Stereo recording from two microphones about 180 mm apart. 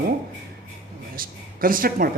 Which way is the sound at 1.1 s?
50° right (ahead or behind).